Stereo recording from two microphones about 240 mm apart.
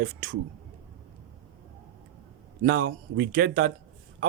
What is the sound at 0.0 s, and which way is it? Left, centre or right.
Speech, right.